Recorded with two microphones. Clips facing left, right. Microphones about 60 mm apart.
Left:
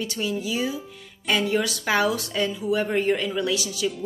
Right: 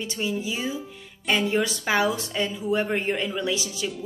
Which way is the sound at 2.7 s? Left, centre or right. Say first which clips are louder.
Left 2 dB; right.